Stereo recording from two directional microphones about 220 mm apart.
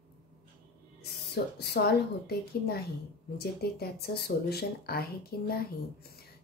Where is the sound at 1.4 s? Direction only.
50° left (ahead or behind).